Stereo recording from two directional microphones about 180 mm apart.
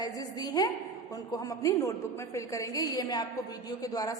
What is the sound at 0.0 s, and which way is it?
A woman's voice, 20° left (ahead or behind).